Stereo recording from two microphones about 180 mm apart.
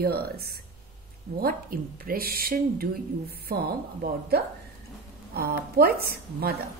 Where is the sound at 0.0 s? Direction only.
60° right (ahead or behind).